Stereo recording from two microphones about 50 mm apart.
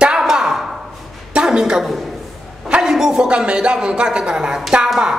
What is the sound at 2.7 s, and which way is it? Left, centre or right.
A man's voice, centre.